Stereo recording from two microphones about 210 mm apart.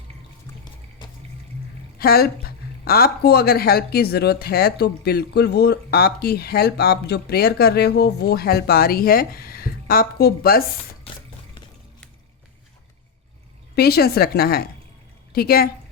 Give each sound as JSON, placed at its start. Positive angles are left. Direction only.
{"t": 1.0, "sound": "water", "side_deg": 20}
{"t": 2.0, "sound": "speech", "side_deg": 45}
{"t": 13.7, "sound": "a woman's voice", "side_deg": 50}